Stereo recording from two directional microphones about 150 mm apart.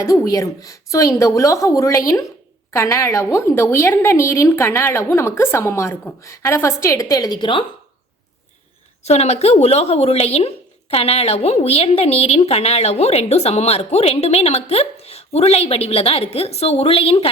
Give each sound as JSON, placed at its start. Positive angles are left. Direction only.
{"t": 0.0, "sound": "a woman's voice", "side_deg": 20}
{"t": 9.0, "sound": "speech", "side_deg": 45}